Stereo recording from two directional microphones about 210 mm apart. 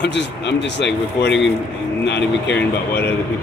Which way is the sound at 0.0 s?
55° left (ahead or behind).